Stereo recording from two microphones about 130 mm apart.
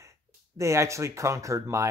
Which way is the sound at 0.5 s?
20° right (ahead or behind).